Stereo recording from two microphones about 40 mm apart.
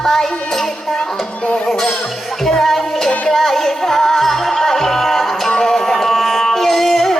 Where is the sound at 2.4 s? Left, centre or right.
Centre.